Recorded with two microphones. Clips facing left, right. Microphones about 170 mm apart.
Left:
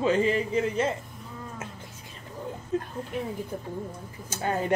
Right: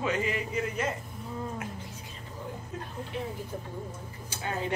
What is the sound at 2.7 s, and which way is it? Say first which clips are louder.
Speech: left 14 dB; 30° left (ahead or behind).